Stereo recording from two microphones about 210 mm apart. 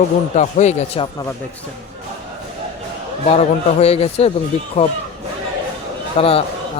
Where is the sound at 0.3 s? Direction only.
35° left (ahead or behind).